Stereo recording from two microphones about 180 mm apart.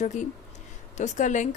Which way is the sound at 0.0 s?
45° left (ahead or behind).